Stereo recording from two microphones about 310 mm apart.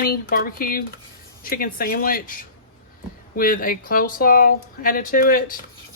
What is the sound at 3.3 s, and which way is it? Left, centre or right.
Speech, left.